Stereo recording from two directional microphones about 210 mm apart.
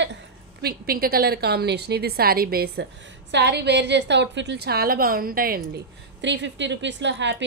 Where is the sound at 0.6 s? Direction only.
45° right (ahead or behind).